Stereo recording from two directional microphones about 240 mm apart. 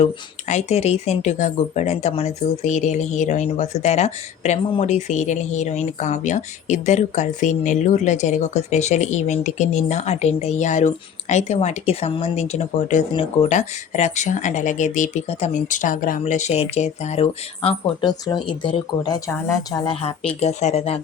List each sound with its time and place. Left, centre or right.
0.0 s speech: left